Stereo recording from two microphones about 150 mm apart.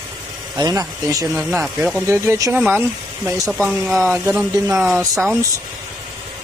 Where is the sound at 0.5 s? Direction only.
25° right (ahead or behind).